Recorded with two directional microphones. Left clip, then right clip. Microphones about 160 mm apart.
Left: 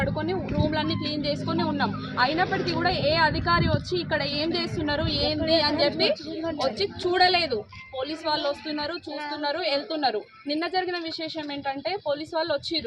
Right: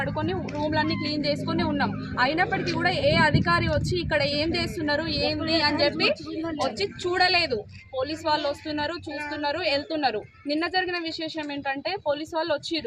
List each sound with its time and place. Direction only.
0.0 s a sound: 15° left (ahead or behind)
0.7 s a woman's voice: 5° right (ahead or behind); by 3.7 s 20° right (ahead or behind)
4.9 s speech: 5° right (ahead or behind); by 12.8 s 10° left (ahead or behind)